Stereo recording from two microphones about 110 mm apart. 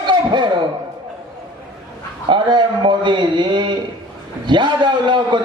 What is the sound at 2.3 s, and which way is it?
A man's voice, 45° right (ahead or behind).